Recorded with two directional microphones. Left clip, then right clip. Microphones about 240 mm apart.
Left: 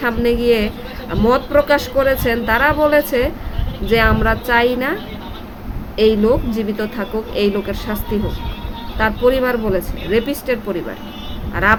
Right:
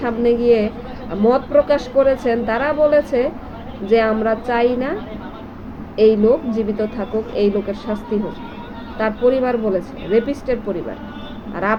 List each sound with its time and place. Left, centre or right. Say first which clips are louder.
0.0 s speech: even; centre
6.0 s speech: right 1 dB; centre